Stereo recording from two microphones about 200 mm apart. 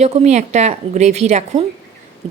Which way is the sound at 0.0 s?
30° right (ahead or behind).